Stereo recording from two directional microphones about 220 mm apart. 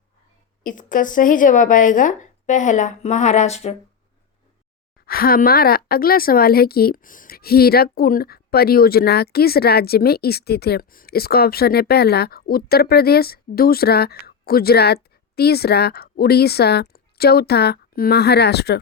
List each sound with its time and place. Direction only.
0.6 s speech: 35° left (ahead or behind)
5.0 s a woman's voice: 40° left (ahead or behind)